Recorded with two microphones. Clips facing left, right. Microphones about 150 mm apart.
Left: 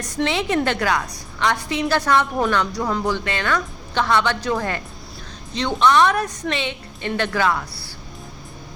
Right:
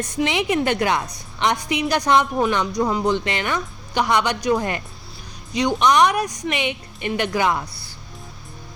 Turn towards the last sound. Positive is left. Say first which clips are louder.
# even
turn(degrees=-20)  # may be behind; listen again after turning